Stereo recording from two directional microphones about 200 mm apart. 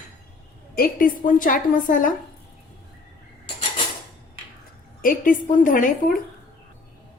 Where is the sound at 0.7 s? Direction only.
45° left (ahead or behind).